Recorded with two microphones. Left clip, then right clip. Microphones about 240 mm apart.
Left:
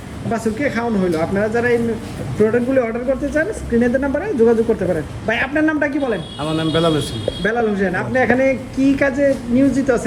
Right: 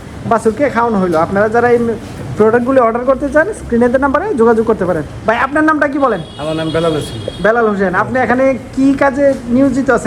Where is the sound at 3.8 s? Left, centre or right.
Right.